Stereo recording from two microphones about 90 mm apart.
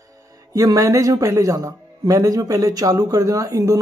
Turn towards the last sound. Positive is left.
turn(degrees=-40)  # may be behind; listen again after turning